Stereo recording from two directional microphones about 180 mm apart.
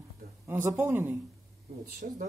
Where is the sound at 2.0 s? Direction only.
50° right (ahead or behind).